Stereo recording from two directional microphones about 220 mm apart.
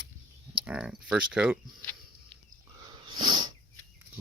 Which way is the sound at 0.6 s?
5° right (ahead or behind).